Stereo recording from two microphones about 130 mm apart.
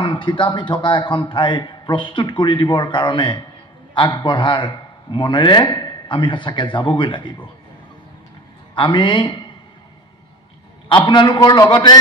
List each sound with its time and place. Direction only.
0.0 s a man's voice: 40° left (ahead or behind)
8.7 s a man's voice: 40° left (ahead or behind)
10.9 s a man's voice: 35° left (ahead or behind)